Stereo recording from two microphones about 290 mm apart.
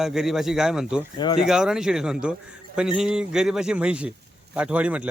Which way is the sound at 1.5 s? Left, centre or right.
Centre.